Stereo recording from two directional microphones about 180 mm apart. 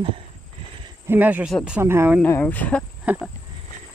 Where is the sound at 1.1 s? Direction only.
10° right (ahead or behind).